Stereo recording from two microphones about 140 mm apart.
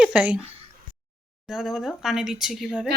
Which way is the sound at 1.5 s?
5° right (ahead or behind).